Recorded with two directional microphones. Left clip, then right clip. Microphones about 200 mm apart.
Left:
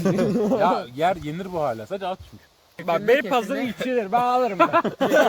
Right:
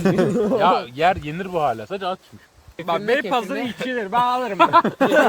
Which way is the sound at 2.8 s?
40° left (ahead or behind).